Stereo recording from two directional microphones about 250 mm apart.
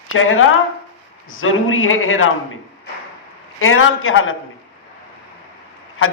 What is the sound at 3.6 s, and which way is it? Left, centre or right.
Speech, left.